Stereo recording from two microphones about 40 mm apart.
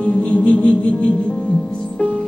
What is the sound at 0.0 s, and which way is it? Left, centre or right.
Music, left.